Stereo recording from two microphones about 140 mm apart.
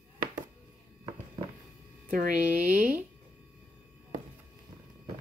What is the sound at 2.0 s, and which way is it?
Speech, 70° right (ahead or behind).